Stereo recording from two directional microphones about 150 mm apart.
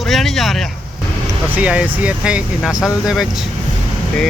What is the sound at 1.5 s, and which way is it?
Speech, 10° right (ahead or behind).